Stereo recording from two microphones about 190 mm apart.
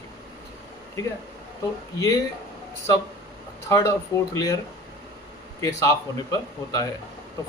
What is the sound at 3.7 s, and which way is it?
Speech, 15° left (ahead or behind).